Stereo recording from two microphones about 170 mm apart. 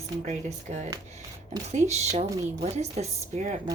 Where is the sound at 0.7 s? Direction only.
40° right (ahead or behind).